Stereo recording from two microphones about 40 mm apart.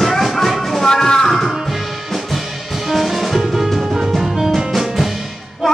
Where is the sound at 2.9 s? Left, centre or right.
Centre.